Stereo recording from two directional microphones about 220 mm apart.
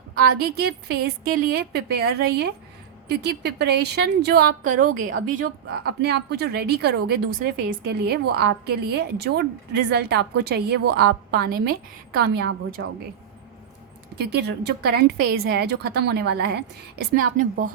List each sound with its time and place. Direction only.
0.4 s a woman's voice: 45° right (ahead or behind)
14.2 s a woman's voice: 50° right (ahead or behind)